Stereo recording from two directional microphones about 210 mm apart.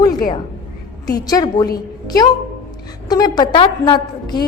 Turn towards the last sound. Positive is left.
turn(degrees=20)  # may be behind; listen again after turning